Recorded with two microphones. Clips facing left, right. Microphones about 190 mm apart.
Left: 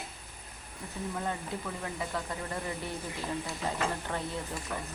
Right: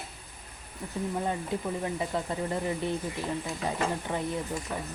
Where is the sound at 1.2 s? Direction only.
20° right (ahead or behind).